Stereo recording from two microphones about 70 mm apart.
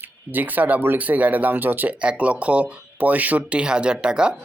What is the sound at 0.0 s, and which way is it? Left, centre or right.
Speech, right.